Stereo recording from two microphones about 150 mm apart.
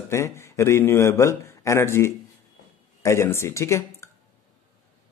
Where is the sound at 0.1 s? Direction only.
20° left (ahead or behind).